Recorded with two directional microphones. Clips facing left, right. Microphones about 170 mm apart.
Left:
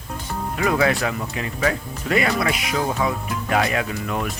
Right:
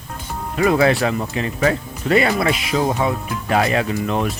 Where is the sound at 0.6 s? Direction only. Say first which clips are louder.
Right 5 dB; 30° right (ahead or behind).